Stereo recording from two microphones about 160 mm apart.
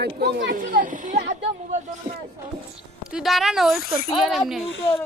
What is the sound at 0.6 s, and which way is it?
Speech, 55° right (ahead or behind).